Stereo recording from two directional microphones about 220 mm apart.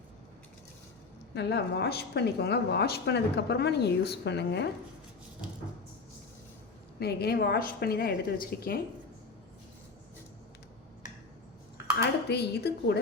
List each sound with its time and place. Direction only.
1.3 s speech: 50° left (ahead or behind)
7.0 s speech: 45° left (ahead or behind)
11.9 s speech: 50° left (ahead or behind)